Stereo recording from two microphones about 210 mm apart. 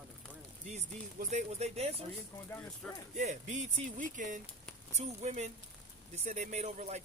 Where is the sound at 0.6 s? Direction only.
30° right (ahead or behind).